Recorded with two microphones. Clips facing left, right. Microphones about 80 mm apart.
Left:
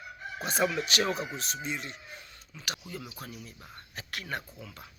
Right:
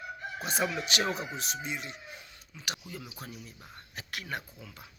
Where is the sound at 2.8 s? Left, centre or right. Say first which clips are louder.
Left 2 dB; centre.